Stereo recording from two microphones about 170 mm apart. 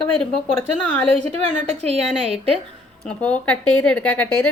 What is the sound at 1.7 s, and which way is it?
Speech, 40° right (ahead or behind).